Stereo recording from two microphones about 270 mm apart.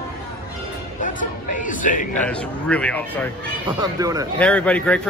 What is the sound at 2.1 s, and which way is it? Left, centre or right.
Speech, centre.